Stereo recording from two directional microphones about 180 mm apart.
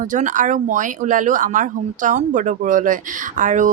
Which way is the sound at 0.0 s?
45° right (ahead or behind).